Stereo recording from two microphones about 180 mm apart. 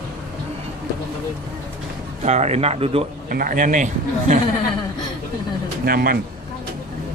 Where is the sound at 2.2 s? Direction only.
40° right (ahead or behind).